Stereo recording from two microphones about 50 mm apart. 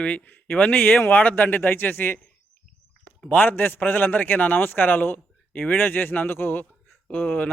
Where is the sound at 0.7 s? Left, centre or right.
Left.